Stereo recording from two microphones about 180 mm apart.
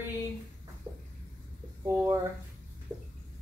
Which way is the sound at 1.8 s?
15° right (ahead or behind).